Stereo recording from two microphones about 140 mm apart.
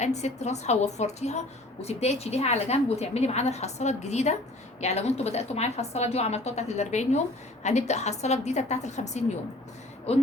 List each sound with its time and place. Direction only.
0.0 s a woman's voice: 55° left (ahead or behind)
10.1 s a woman's voice: 45° left (ahead or behind)